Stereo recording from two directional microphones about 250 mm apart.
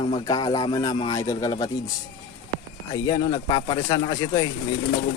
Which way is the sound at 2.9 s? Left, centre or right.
Centre.